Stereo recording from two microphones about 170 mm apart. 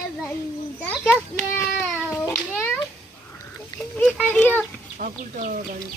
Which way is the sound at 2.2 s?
15° left (ahead or behind).